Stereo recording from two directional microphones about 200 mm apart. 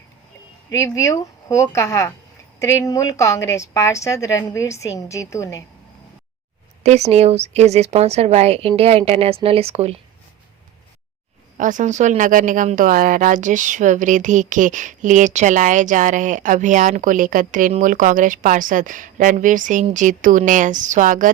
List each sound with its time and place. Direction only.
0.7 s a woman's voice: 15° left (ahead or behind)
6.8 s a woman's voice: 35° right (ahead or behind)
11.5 s a woman's voice: 40° right (ahead or behind)